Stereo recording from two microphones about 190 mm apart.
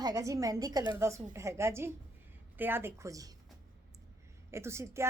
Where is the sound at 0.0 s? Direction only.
15° right (ahead or behind).